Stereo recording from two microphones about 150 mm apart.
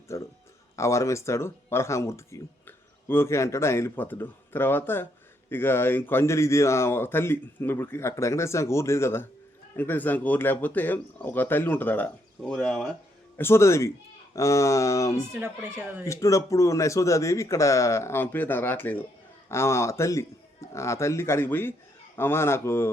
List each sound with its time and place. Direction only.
0.1 s speech: 20° left (ahead or behind); by 12.8 s 5° left (ahead or behind)
13.3 s speech: 15° left (ahead or behind)
15.3 s speech: 15° right (ahead or behind)
16.0 s a man's voice: 20° left (ahead or behind)